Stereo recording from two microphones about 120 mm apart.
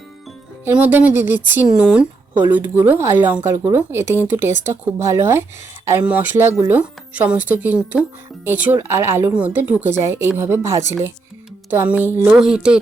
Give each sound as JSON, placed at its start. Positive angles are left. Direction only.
{"t": 0.6, "sound": "speech", "side_deg": -15}